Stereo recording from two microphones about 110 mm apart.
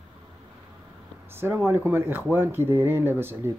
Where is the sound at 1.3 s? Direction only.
20° right (ahead or behind).